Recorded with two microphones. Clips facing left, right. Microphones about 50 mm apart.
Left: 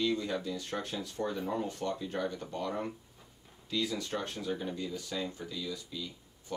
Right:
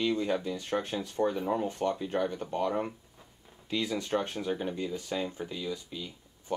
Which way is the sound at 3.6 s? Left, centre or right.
Right.